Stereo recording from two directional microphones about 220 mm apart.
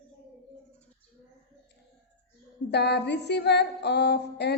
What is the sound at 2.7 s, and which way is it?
A woman's voice, 50° left (ahead or behind).